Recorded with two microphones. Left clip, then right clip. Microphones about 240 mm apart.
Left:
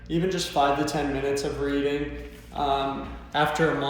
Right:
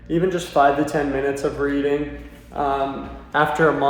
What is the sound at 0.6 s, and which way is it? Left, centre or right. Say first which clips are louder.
Speech: right 6 dB; centre.